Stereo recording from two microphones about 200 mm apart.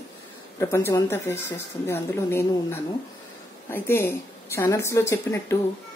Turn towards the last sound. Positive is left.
turn(degrees=15)  # may be behind; listen again after turning